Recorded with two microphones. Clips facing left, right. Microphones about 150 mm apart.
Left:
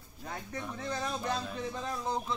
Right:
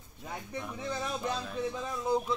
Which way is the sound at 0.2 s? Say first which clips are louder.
Right 1 dB; 10° right (ahead or behind).